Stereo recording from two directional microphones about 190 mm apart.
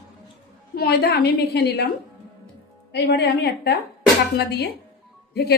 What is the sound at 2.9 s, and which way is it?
A woman's voice, 60° left (ahead or behind).